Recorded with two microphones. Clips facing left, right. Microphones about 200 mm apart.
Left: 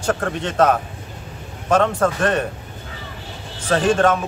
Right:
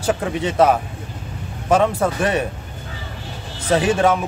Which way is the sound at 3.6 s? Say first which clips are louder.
Even; 10° right (ahead or behind).